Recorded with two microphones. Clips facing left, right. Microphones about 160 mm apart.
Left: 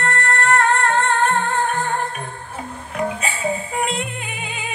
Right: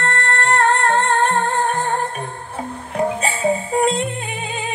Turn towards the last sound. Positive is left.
turn(degrees=-30)  # may be behind; listen again after turning